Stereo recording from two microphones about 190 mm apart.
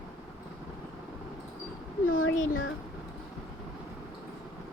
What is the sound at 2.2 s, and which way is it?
Speech, 90° left.